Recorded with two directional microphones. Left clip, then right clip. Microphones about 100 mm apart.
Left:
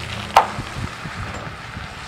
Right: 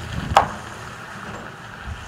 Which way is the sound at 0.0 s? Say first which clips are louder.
Left 2 dB; 55° left (ahead or behind).